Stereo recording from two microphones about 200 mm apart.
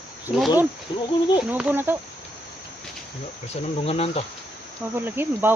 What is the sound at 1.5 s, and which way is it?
Speech, 10° right (ahead or behind).